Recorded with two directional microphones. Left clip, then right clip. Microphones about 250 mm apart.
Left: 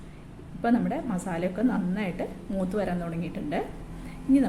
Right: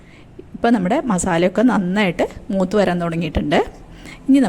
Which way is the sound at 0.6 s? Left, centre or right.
Right.